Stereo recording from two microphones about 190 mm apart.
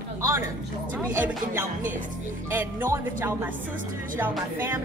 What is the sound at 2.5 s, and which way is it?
Speech, 10° right (ahead or behind).